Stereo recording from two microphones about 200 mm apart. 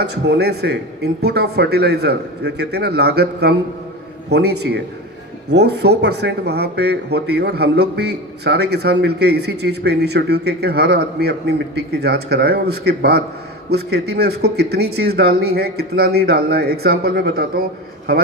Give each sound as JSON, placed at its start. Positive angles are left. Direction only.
{"t": 0.0, "sound": "speech", "side_deg": -55}